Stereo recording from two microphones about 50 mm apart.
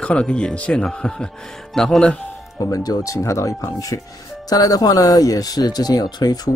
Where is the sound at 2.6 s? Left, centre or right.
Left.